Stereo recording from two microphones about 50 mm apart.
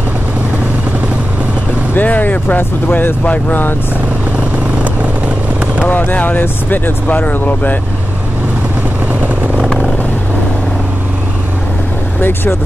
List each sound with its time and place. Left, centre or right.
2.0 s speech: left
5.9 s speech: left
12.2 s speech: left